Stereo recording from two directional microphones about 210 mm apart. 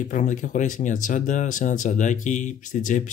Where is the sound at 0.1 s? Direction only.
35° left (ahead or behind).